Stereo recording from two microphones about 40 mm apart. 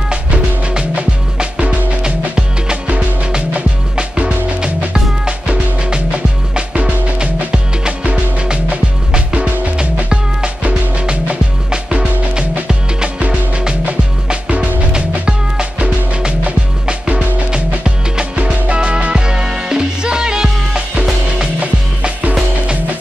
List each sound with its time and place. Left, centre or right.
0.1 s music: right
3.9 s music: right
14.9 s music: right
17.5 s music: right